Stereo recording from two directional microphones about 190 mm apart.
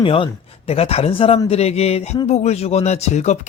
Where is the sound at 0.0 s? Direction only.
30° left (ahead or behind).